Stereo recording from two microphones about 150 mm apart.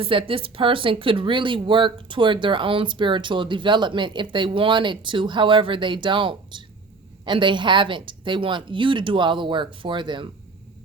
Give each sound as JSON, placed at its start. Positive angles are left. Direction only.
{"t": 0.0, "sound": "speech", "side_deg": -35}